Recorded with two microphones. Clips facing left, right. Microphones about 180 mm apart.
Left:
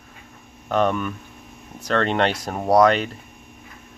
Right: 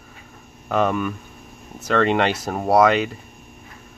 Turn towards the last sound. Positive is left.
turn(degrees=-5)  # may be behind; listen again after turning